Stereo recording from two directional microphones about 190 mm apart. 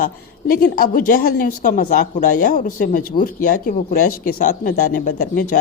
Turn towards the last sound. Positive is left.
turn(degrees=45)  # may be behind; listen again after turning